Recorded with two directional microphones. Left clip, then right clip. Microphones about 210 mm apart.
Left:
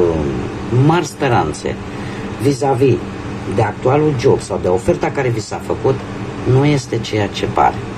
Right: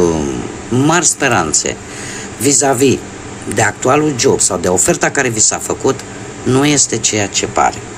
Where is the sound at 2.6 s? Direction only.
50° right (ahead or behind).